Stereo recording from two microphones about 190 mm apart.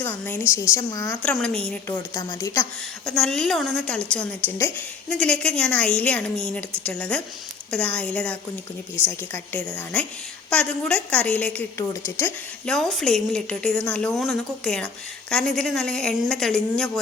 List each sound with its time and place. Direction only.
0.0 s a woman's voice: 10° left (ahead or behind)
1.9 s a woman's voice: 15° left (ahead or behind)
3.1 s a woman's voice: centre (ahead or behind)